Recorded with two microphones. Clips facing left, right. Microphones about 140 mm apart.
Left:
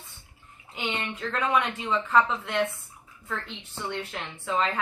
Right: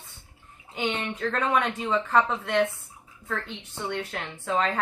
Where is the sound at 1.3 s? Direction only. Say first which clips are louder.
Even; 40° right (ahead or behind).